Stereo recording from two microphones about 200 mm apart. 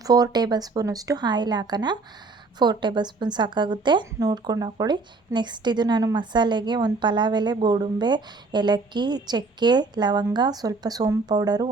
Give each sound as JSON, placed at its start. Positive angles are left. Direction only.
{"t": 0.0, "sound": "a woman's voice", "side_deg": -20}